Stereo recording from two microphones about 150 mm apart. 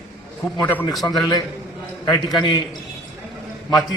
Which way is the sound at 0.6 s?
10° left (ahead or behind).